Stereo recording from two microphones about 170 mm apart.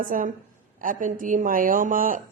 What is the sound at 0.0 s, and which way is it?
A woman's voice, 50° right (ahead or behind).